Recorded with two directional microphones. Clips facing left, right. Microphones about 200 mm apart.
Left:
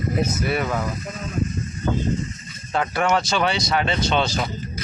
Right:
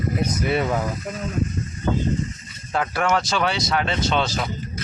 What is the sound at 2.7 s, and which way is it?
Speech, centre (ahead or behind).